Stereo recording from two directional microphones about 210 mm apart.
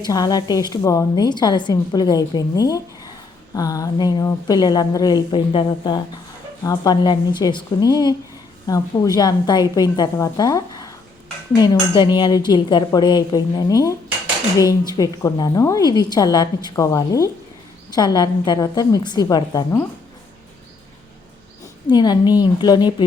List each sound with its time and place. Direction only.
0.1 s a woman's voice: 15° left (ahead or behind)
21.8 s a woman's voice: 20° left (ahead or behind)